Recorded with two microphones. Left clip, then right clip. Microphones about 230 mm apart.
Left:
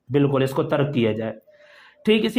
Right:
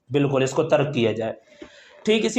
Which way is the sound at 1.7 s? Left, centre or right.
Left.